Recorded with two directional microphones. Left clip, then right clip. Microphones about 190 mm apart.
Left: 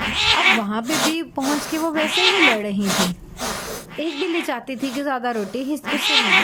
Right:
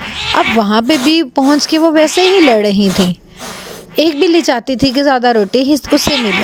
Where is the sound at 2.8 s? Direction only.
Centre (ahead or behind).